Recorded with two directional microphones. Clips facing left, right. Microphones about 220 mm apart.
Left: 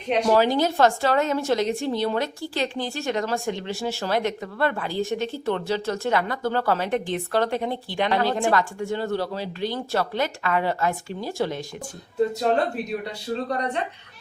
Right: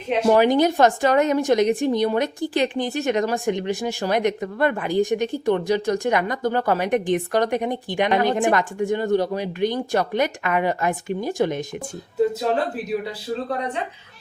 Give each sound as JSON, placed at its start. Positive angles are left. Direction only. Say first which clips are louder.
{"t": 0.3, "sound": "a woman's voice", "louder": "right 5 dB", "side_deg": -15}
{"t": 12.4, "sound": "speech", "louder": "even", "side_deg": -5}